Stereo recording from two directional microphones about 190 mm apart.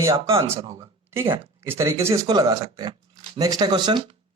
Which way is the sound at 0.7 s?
15° right (ahead or behind).